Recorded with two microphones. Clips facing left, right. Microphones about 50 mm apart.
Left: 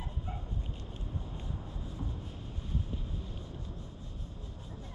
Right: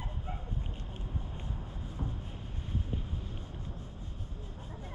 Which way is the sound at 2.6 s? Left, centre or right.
Right.